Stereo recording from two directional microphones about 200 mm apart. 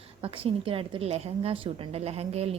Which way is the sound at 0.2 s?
25° right (ahead or behind).